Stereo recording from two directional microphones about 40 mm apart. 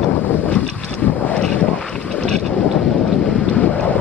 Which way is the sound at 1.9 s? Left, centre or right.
Left.